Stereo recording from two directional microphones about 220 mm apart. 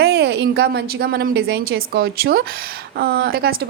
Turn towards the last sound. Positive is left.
turn(degrees=-45)  # may be behind; listen again after turning